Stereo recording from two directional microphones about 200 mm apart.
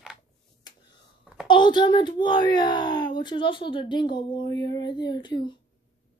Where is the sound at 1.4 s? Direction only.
25° left (ahead or behind).